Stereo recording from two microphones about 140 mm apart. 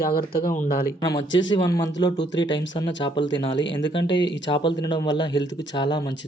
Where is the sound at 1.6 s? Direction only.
25° left (ahead or behind).